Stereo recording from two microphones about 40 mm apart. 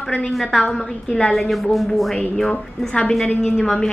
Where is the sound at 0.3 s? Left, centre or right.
Centre.